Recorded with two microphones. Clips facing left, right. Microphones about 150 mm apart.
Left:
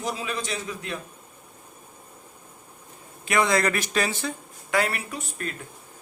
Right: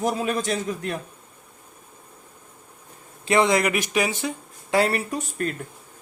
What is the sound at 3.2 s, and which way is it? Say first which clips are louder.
Speech: right 3 dB; 25° right (ahead or behind).